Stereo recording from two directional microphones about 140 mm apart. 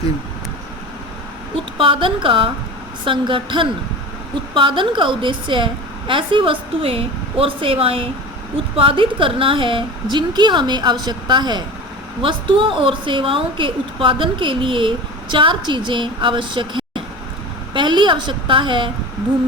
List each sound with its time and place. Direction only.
1.8 s a woman's voice: 40° right (ahead or behind)